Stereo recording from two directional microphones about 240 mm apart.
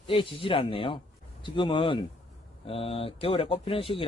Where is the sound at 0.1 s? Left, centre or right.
Left.